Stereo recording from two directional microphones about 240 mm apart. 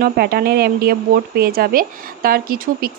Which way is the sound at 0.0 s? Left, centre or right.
Right.